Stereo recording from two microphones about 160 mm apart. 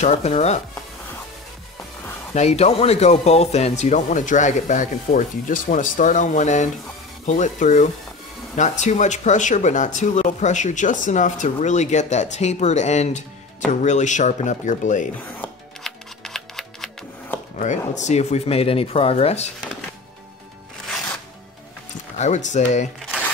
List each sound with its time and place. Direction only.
0.0 s speech: 40° left (ahead or behind)
2.3 s speech: 40° left (ahead or behind)
15.4 s music: centre (ahead or behind)
17.6 s speech: 45° left (ahead or behind)
22.2 s speech: 50° left (ahead or behind)